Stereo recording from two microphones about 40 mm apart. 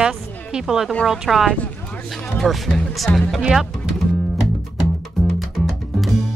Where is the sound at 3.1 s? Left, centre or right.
Left.